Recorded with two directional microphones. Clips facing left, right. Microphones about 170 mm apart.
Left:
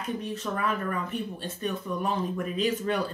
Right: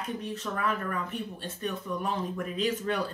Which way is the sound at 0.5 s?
15° left (ahead or behind).